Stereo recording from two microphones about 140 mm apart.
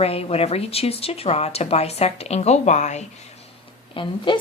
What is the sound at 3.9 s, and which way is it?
Speech, 35° left (ahead or behind).